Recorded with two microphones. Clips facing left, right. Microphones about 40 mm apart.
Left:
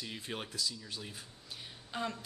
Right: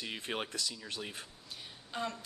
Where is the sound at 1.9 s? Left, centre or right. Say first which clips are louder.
Even; centre.